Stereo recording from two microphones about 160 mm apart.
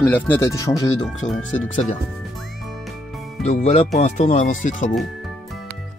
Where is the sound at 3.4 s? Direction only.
45° left (ahead or behind).